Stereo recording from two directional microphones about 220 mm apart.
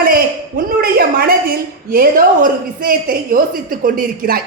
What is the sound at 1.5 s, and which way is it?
A woman's voice, 40° right (ahead or behind).